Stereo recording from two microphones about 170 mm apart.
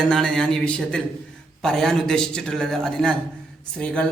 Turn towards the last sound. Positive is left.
turn(degrees=5)  # may be behind; listen again after turning